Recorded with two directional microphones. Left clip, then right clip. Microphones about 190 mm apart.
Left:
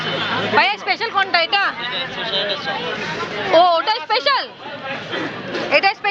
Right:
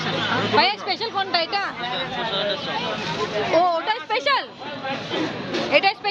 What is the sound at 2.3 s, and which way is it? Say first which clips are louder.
Speech: left 4 dB; 35° right (ahead or behind).